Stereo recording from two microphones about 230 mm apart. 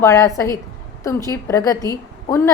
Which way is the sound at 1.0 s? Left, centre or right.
Centre.